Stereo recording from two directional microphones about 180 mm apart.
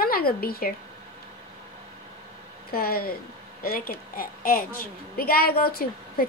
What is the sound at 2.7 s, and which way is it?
A woman's voice, 55° left (ahead or behind).